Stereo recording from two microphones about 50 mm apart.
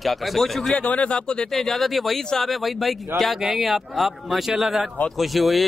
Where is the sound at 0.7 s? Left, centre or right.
Left.